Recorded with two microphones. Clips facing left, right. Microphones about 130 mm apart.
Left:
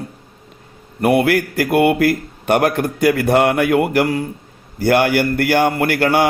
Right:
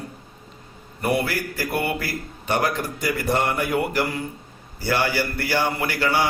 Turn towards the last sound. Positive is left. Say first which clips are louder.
# left 7 dB
turn(degrees=55)  # may be behind; listen again after turning